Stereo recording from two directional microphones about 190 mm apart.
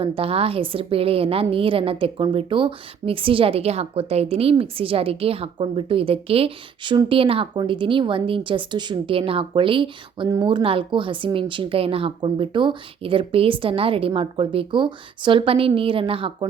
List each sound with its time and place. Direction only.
0.0 s a woman's voice: 30° right (ahead or behind)